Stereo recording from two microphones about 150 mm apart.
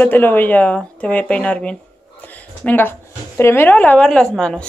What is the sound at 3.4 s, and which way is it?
A man's voice, 15° left (ahead or behind).